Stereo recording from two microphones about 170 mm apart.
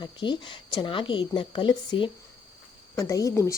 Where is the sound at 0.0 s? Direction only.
25° left (ahead or behind).